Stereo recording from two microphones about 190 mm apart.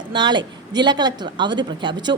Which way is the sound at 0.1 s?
25° right (ahead or behind).